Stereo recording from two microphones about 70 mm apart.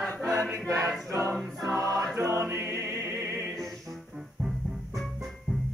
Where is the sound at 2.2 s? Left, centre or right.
Right.